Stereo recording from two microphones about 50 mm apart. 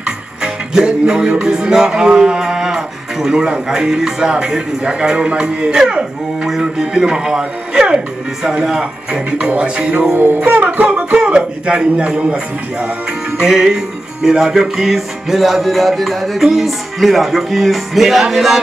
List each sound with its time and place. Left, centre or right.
0.0 s music: centre
5.8 s speech: centre
10.1 s music: right
10.4 s speech: right
13.4 s music: centre